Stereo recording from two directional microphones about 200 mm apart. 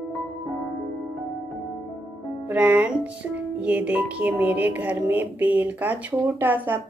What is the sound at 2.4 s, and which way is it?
Music, 5° right (ahead or behind).